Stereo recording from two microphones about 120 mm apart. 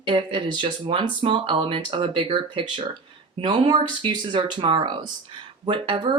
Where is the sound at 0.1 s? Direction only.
40° right (ahead or behind).